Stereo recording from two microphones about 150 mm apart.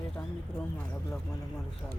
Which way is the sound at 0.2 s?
20° left (ahead or behind).